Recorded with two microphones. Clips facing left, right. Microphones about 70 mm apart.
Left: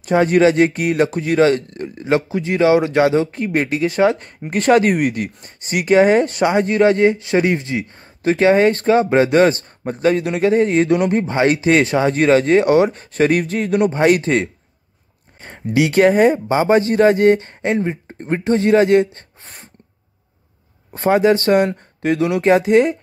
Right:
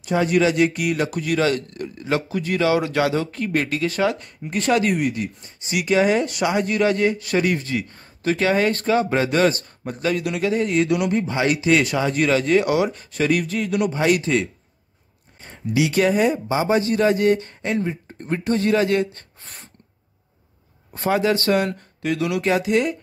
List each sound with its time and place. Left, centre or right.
0.0 s speech: left
4.0 s speech: left
15.7 s speech: left
20.9 s speech: left